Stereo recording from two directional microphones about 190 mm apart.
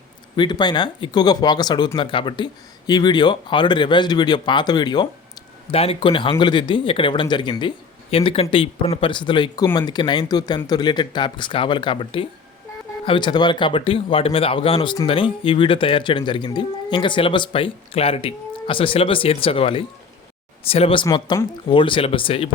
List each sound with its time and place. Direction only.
0.3 s speech: 20° left (ahead or behind)